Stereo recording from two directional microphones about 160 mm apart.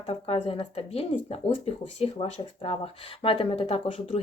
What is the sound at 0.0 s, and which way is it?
Speech, 40° left (ahead or behind).